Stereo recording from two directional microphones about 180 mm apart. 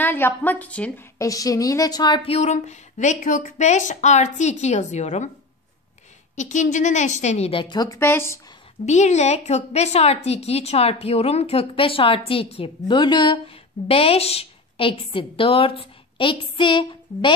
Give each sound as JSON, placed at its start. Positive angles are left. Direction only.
{"t": 0.0, "sound": "a woman's voice", "side_deg": 10}
{"t": 6.3, "sound": "a woman's voice", "side_deg": 40}
{"t": 8.8, "sound": "a woman's voice", "side_deg": 40}